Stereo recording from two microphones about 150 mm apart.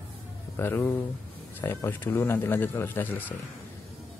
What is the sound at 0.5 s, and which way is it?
Speech, 15° left (ahead or behind).